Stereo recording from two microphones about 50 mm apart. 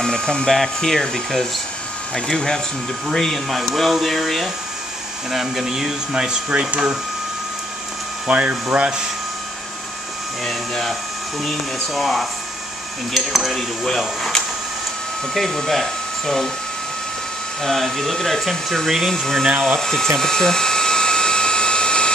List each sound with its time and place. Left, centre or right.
0.0 s speech: centre
0.5 s speech: centre
8.3 s speech: right
10.4 s speech: centre
17.6 s speech: centre
20.2 s drill: centre